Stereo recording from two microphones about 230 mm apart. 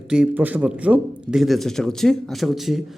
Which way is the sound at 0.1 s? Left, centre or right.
Centre.